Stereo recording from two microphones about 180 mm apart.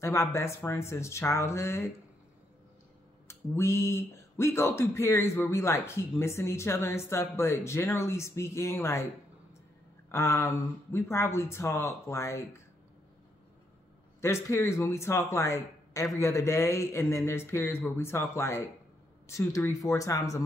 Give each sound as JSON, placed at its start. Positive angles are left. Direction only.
{"t": 0.0, "sound": "speech", "side_deg": 15}
{"t": 3.3, "sound": "speech", "side_deg": 15}
{"t": 10.1, "sound": "speech", "side_deg": 15}
{"t": 14.2, "sound": "speech", "side_deg": 15}